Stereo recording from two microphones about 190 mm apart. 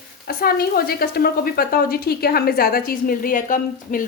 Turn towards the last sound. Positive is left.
turn(degrees=45)  # may be behind; listen again after turning